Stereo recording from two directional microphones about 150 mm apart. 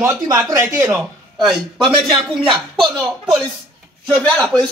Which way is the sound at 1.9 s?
35° right (ahead or behind).